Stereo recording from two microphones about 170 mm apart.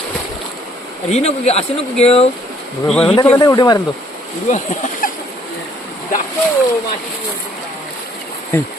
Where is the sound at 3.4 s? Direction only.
25° left (ahead or behind).